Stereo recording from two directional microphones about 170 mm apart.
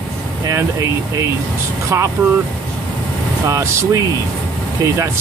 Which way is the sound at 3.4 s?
15° right (ahead or behind).